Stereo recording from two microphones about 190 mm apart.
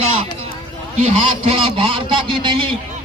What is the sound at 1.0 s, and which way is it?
A man's voice, 35° right (ahead or behind).